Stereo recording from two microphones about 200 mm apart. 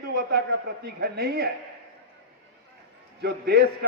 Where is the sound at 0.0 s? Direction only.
55° right (ahead or behind).